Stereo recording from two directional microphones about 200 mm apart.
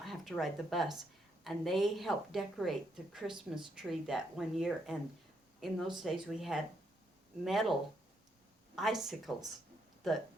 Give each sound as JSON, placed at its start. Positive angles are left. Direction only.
{"t": 0.0, "sound": "a woman's voice", "side_deg": 0}